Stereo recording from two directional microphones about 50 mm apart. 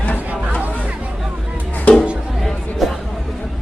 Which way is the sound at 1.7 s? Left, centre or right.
Left.